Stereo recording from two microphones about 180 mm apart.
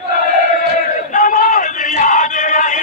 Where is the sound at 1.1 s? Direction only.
45° left (ahead or behind).